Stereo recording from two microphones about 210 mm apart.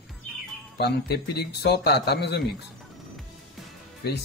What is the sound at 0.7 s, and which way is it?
Speech, 50° left (ahead or behind).